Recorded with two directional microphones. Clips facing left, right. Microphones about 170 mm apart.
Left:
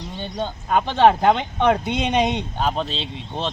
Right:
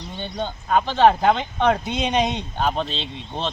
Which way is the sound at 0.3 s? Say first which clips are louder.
Even; 10° left (ahead or behind).